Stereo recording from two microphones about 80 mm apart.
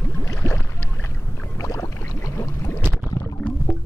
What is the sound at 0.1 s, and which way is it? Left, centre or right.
Boat, left.